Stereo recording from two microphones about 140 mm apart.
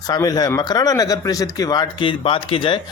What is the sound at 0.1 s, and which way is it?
A man's voice, 25° left (ahead or behind).